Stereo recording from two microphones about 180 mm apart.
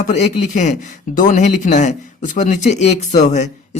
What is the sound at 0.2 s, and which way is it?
Speech, 40° left (ahead or behind).